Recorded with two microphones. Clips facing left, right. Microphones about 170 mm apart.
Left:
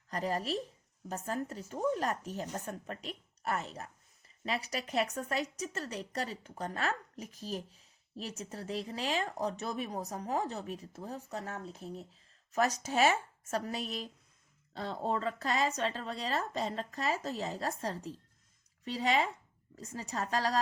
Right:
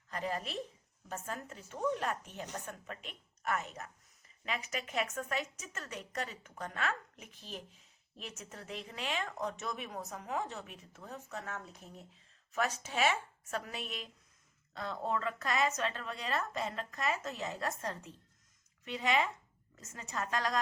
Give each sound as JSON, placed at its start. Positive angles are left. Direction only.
{"t": 0.1, "sound": "a woman's voice", "side_deg": 40}